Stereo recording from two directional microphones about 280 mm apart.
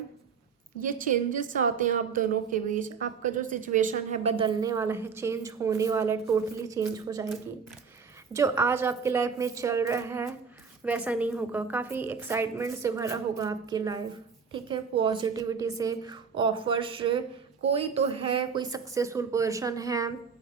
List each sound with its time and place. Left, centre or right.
0.8 s a woman's voice: right; by 7.3 s centre
8.3 s a woman's voice: centre